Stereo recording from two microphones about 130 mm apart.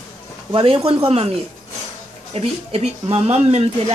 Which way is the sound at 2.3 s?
50° right (ahead or behind).